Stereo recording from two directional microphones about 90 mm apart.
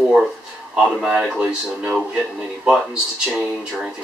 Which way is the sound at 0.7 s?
10° right (ahead or behind).